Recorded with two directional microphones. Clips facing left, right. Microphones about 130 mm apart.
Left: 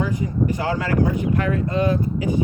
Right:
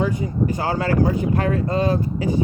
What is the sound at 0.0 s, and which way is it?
Speech, 25° right (ahead or behind).